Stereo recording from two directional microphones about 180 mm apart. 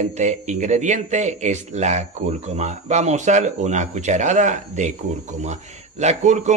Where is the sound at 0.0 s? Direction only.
40° right (ahead or behind).